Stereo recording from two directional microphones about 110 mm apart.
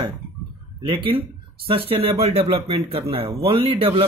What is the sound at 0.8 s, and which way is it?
Speech, 50° right (ahead or behind).